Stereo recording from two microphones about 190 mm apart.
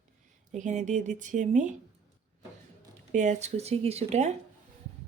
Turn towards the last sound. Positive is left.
turn(degrees=-35)  # may be behind; listen again after turning